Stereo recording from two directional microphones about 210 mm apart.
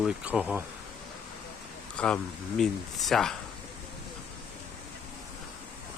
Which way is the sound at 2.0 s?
5° left (ahead or behind).